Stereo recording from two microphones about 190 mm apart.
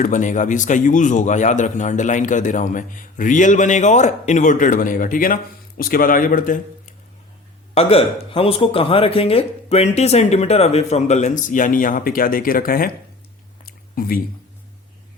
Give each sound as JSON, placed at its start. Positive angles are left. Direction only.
{"t": 0.0, "sound": "speech", "side_deg": 40}
{"t": 7.7, "sound": "speech", "side_deg": 30}
{"t": 13.7, "sound": "a sound", "side_deg": 50}